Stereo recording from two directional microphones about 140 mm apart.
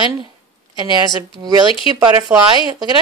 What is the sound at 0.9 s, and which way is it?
Speech, 30° right (ahead or behind).